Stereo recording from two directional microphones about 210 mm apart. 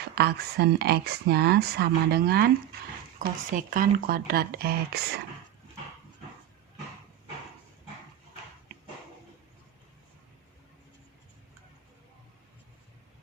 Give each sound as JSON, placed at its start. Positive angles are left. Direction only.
{"t": 0.0, "sound": "speech", "side_deg": -50}